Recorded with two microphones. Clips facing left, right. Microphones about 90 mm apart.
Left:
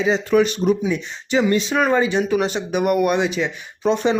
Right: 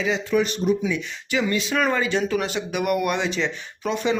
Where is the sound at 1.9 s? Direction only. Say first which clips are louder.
Left 4 dB; 20° left (ahead or behind).